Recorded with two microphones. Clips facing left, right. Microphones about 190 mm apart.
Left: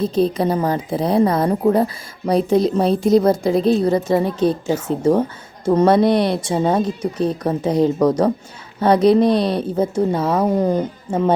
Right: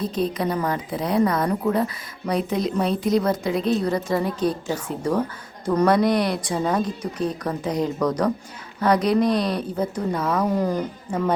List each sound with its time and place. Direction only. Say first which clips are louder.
0.0 s speech: left 6 dB; 30° left (ahead or behind)